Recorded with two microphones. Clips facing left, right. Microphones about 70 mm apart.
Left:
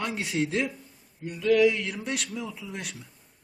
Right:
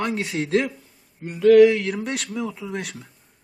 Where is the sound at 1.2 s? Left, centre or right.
Right.